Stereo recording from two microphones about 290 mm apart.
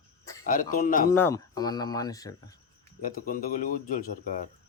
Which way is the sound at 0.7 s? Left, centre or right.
Left.